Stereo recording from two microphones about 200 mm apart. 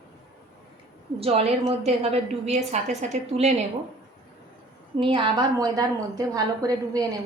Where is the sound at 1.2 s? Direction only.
30° right (ahead or behind).